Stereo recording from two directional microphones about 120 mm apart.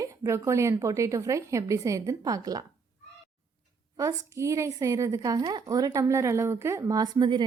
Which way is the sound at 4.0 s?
25° right (ahead or behind).